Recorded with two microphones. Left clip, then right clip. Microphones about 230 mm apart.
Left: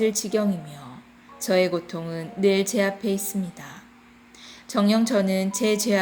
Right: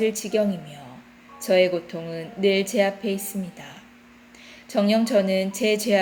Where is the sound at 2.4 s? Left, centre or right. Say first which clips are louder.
Right 1 dB; left.